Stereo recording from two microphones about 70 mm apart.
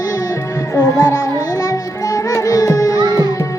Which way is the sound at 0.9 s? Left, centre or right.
Left.